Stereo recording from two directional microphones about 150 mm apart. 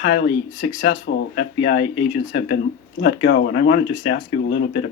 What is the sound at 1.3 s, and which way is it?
Speech, 90° left.